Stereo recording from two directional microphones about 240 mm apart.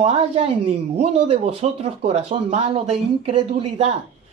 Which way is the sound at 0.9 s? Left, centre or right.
Right.